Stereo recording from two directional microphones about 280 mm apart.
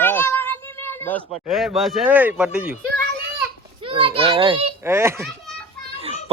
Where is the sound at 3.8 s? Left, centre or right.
Centre.